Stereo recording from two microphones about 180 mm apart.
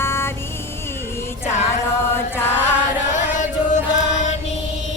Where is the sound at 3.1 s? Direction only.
45° left (ahead or behind).